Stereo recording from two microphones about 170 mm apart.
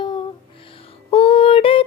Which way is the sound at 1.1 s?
35° left (ahead or behind).